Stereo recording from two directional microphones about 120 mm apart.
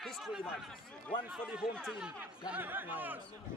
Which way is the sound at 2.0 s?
10° right (ahead or behind).